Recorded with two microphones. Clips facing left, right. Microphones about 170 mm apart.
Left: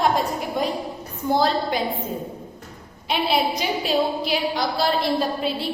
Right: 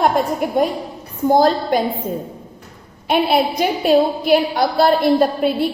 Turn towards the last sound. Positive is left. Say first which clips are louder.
# right 8 dB
turn(degrees=-55)  # may be behind; listen again after turning